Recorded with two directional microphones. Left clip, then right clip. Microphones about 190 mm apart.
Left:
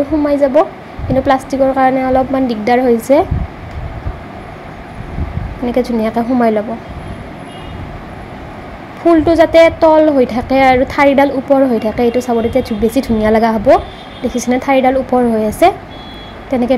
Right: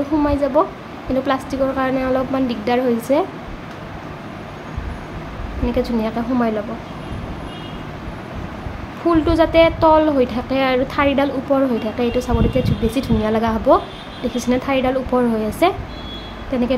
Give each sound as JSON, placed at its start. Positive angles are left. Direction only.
{"t": 0.3, "sound": "a woman's voice", "side_deg": 20}
{"t": 5.7, "sound": "a woman's voice", "side_deg": 20}
{"t": 9.1, "sound": "a woman's voice", "side_deg": 15}